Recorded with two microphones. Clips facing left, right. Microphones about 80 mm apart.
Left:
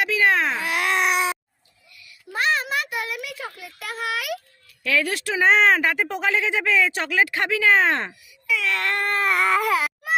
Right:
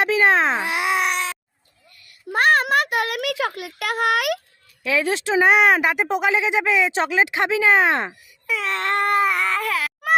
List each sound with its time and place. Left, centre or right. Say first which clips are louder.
0.0 s a child's voice: right 3 dB; right
0.9 s baby cry: left 1 dB; centre
2.0 s a sound: right 6 dB; right
4.8 s speech: right 2 dB; centre
8.4 s speech: right 1 dB; right
9.2 s baby cry: even; centre
9.6 s baby cry: left 3 dB; centre